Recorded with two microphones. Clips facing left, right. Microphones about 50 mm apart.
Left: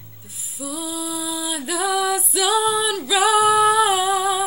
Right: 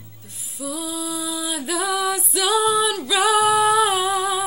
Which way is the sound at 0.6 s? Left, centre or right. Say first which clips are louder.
Even; centre.